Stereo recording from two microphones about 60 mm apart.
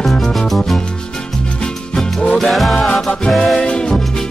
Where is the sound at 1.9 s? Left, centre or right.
Centre.